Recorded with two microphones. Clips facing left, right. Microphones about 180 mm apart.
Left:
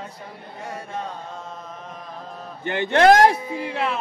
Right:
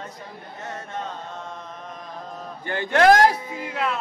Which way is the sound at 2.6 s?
20° left (ahead or behind).